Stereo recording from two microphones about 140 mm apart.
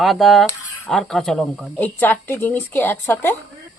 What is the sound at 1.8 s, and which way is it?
Speech, 15° left (ahead or behind).